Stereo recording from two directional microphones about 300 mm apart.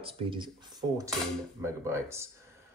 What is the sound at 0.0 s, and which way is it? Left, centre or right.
Speech, centre.